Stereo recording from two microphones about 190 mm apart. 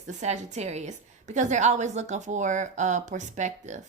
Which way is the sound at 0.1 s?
40° right (ahead or behind).